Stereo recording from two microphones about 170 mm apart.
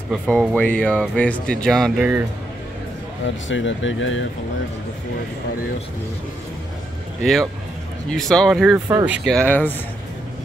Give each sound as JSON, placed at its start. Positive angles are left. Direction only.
{"t": 0.1, "sound": "speech", "side_deg": -5}
{"t": 3.4, "sound": "speech", "side_deg": 90}
{"t": 8.1, "sound": "speech", "side_deg": 5}
{"t": 9.3, "sound": "speech", "side_deg": 10}